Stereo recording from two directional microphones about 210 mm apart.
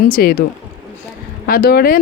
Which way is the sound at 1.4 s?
45° left (ahead or behind).